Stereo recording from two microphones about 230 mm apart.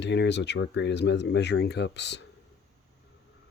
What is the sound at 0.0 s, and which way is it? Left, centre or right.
Speech, left.